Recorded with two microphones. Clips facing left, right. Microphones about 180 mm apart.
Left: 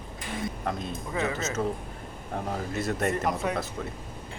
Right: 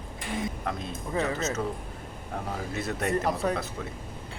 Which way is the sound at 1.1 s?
35° right (ahead or behind).